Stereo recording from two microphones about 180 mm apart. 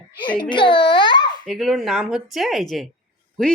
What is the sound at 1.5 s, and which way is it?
Speech, centre (ahead or behind).